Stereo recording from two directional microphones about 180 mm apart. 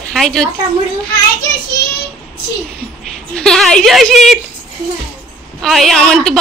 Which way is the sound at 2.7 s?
5° left (ahead or behind).